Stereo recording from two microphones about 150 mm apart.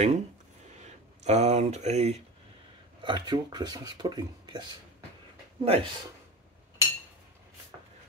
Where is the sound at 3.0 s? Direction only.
30° right (ahead or behind).